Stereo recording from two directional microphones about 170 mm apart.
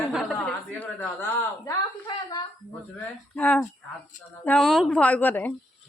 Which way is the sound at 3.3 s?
10° left (ahead or behind).